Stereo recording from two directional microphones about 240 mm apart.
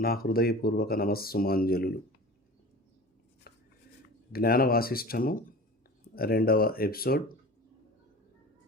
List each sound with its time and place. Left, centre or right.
0.0 s speech: left
3.5 s a sound: left
4.3 s speech: left